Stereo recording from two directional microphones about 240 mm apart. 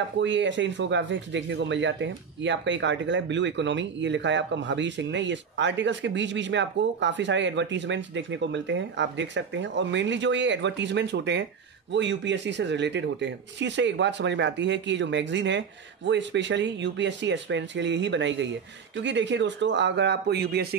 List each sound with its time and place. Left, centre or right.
0.2 s speech: right